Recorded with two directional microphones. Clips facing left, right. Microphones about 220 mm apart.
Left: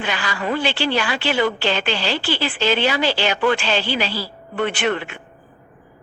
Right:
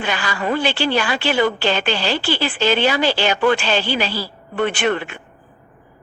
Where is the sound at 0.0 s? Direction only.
45° right (ahead or behind).